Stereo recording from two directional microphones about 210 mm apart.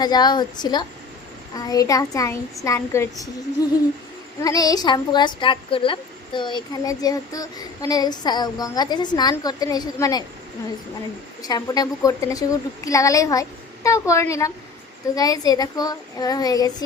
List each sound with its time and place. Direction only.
0.0 s a woman's voice: 20° left (ahead or behind)
4.4 s a woman's voice: 15° left (ahead or behind)
11.4 s a woman's voice: 20° left (ahead or behind)